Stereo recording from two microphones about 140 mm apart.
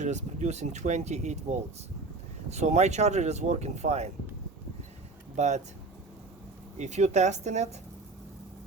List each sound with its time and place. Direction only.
0.0 s speech: 55° right (ahead or behind)
5.4 s speech: 55° right (ahead or behind)
6.7 s speech: 55° right (ahead or behind)